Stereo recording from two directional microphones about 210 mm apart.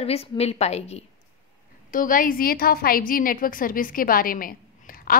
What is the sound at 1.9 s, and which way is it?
A woman's voice, 40° left (ahead or behind).